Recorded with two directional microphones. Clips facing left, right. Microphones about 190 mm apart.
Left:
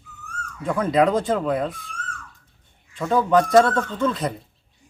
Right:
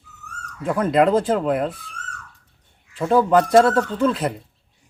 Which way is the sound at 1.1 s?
5° right (ahead or behind).